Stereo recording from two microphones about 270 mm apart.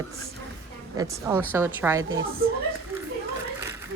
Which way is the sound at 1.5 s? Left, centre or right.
Centre.